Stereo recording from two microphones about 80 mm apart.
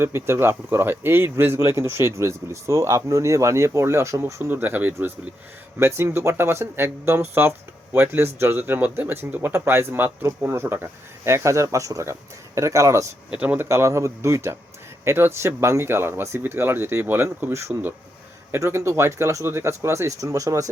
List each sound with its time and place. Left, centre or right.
0.0 s speech: right
4.4 s speech: right
13.3 s speech: centre
13.6 s speech: right